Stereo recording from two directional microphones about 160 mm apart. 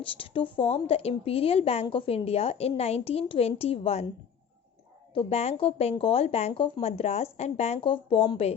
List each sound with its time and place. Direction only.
0.0 s a woman's voice: 35° left (ahead or behind)
5.1 s a woman's voice: 40° left (ahead or behind)